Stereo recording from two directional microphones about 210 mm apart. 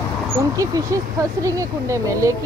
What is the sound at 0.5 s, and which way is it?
Speech, 15° right (ahead or behind).